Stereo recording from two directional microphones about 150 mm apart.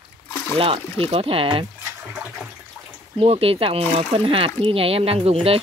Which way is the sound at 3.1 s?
40° right (ahead or behind).